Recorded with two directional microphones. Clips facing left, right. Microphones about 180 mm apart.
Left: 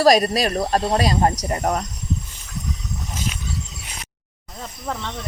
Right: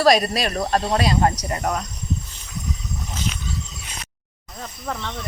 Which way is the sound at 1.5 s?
30° left (ahead or behind).